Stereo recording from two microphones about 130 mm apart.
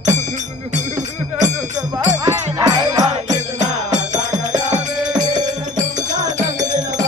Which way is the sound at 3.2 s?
65° right (ahead or behind).